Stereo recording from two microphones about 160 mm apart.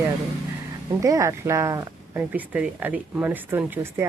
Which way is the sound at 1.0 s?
20° right (ahead or behind).